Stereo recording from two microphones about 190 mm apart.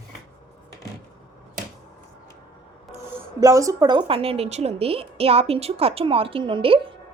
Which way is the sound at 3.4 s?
15° right (ahead or behind).